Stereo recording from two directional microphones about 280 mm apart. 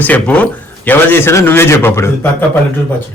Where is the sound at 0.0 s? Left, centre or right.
Centre.